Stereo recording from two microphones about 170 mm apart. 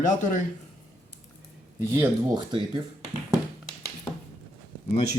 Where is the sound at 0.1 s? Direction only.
45° left (ahead or behind).